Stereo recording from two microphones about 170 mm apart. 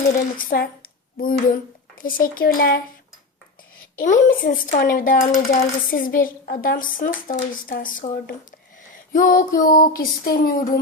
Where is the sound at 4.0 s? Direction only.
55° left (ahead or behind).